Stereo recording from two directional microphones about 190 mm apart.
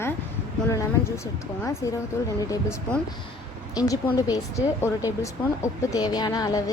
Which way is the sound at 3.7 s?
20° left (ahead or behind).